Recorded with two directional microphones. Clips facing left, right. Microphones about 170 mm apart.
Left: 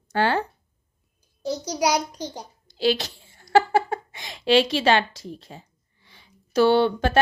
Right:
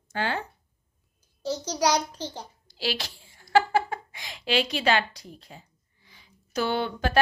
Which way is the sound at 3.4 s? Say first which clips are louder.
Left 3 dB; 40° left (ahead or behind).